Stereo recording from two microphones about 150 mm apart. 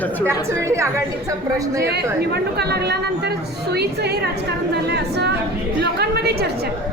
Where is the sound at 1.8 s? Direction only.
90° right.